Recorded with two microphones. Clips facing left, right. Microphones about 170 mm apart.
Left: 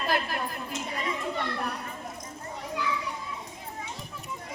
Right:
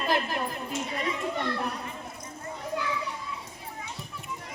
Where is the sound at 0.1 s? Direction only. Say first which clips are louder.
Right 2 dB; 20° right (ahead or behind).